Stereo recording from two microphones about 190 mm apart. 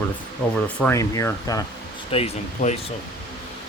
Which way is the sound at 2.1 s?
30° left (ahead or behind).